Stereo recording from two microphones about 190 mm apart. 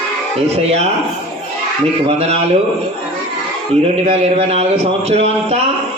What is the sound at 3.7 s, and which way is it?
A man's voice, 30° right (ahead or behind).